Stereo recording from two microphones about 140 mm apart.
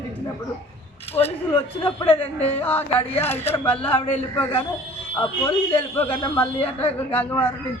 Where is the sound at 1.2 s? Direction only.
40° left (ahead or behind).